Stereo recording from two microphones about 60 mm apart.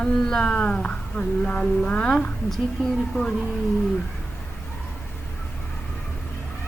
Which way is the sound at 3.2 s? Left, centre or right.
Left.